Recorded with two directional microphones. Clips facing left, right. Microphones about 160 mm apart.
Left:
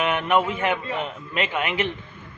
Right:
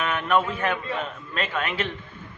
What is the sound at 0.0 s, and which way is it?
A man's voice, 20° left (ahead or behind).